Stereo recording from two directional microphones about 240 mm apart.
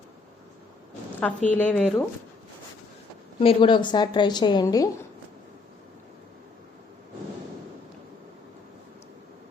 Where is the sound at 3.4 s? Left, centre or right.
Left.